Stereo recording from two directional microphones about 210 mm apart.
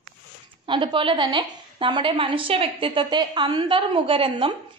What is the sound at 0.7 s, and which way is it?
A woman's voice, 25° right (ahead or behind).